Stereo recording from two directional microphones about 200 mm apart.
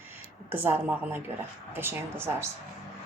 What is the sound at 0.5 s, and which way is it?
Speech, 10° right (ahead or behind).